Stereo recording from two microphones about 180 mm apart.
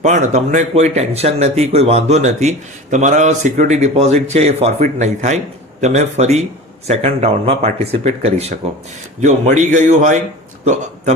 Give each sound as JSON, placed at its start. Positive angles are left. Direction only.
{"t": 0.0, "sound": "a man's voice", "side_deg": -40}